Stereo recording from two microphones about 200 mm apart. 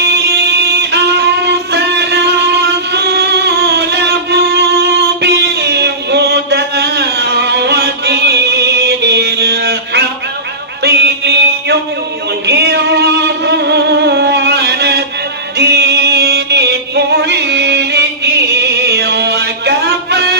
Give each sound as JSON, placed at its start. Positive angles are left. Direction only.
{"t": 0.0, "sound": "music", "side_deg": -55}
{"t": 10.8, "sound": "mantra", "side_deg": -55}
{"t": 12.4, "sound": "music", "side_deg": -55}